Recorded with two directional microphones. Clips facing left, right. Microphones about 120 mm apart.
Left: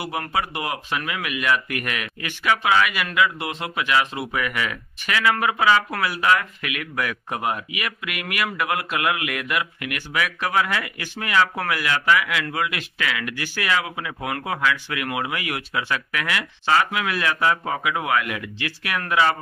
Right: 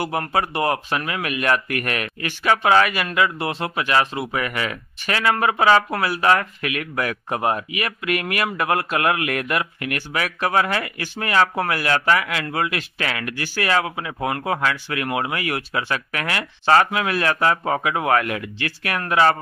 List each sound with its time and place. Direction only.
0.0 s speech: 40° right (ahead or behind)